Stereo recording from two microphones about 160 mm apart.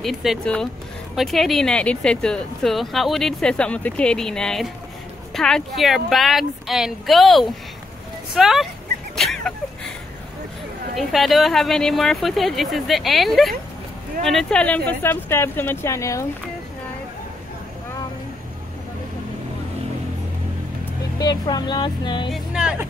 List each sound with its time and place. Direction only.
0.0 s speech: centre (ahead or behind)
9.1 s a sound: centre (ahead or behind)
11.0 s speech: centre (ahead or behind); by 16.3 s 20° left (ahead or behind)
21.2 s speech: 25° left (ahead or behind)
22.3 s speech: 5° right (ahead or behind)